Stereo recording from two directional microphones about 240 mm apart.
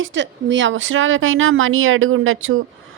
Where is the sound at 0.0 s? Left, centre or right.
Right.